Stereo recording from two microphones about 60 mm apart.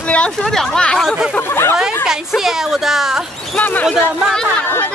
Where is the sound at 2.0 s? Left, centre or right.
Centre.